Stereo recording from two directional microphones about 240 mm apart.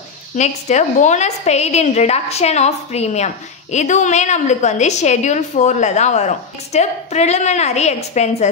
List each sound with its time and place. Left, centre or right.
0.4 s a woman's voice: left